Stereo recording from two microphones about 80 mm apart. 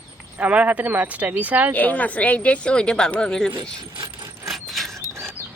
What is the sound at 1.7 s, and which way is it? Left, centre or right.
A woman's voice, centre.